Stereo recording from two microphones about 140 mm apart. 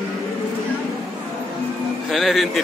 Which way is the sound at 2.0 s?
Centre (ahead or behind).